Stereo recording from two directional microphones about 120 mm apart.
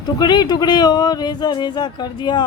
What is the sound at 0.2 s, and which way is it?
A man's voice, 35° left (ahead or behind).